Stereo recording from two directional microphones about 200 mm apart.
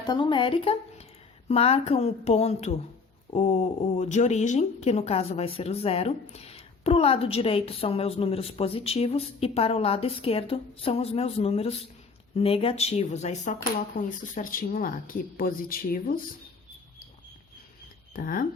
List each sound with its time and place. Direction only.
0.0 s a woman's voice: 20° left (ahead or behind); by 16.2 s 45° left (ahead or behind)
18.1 s speech: 45° left (ahead or behind)